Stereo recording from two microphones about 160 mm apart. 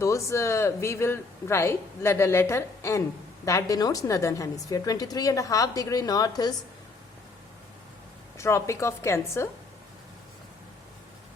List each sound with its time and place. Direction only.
0.0 s a woman's voice: 20° left (ahead or behind)
8.4 s speech: 15° left (ahead or behind)